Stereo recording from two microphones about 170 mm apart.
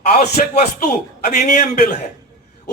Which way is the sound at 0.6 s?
50° left (ahead or behind).